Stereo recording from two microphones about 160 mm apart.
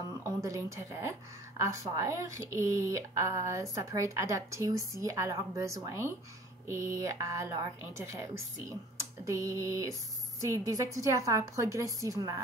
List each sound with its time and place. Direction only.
0.1 s a woman's voice: 20° right (ahead or behind)